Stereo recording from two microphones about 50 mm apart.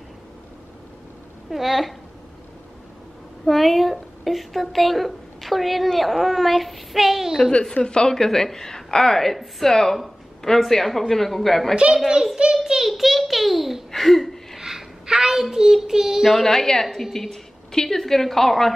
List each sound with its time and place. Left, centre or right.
1.5 s a woman's voice: centre
3.4 s a woman's voice: centre
7.5 s a woman's voice: centre
11.7 s child singing: centre
12.6 s a child's voice: centre
14.6 s a sound: centre
15.5 s child singing: centre
16.3 s a woman's voice: centre